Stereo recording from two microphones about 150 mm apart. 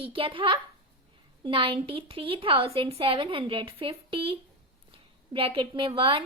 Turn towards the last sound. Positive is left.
turn(degrees=-35)  # may be behind; listen again after turning